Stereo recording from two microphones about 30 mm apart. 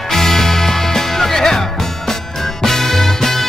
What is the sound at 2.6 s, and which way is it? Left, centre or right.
Music, centre.